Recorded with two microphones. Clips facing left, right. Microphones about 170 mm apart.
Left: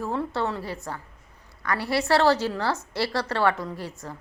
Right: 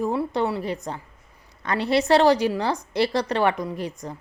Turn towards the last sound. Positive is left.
turn(degrees=-15)  # may be behind; listen again after turning